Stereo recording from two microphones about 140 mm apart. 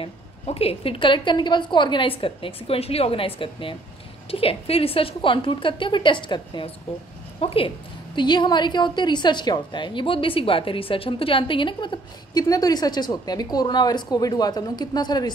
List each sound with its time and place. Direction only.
0.0 s a woman's voice: 45° left (ahead or behind); by 15.3 s 30° left (ahead or behind)